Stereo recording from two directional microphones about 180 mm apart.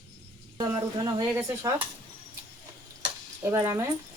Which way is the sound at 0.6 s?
20° right (ahead or behind).